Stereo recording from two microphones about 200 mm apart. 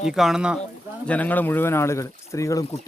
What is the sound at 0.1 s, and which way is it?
Speech, 5° right (ahead or behind).